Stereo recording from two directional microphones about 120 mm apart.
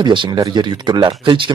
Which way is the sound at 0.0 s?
40° right (ahead or behind).